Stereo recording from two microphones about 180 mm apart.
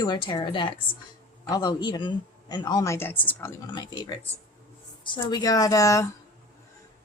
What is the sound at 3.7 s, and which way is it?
Speech, 25° left (ahead or behind).